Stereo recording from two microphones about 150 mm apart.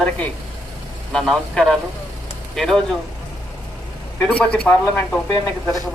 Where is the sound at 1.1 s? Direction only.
5° left (ahead or behind).